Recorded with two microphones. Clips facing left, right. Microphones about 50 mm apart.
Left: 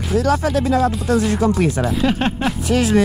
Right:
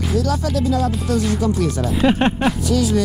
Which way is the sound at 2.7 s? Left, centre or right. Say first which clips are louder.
Left 5 dB; left.